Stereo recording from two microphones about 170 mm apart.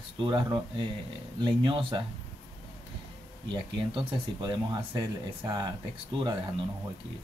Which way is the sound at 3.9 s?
30° right (ahead or behind).